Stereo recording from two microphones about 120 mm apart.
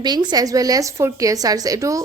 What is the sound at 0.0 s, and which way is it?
A woman's voice, 35° right (ahead or behind).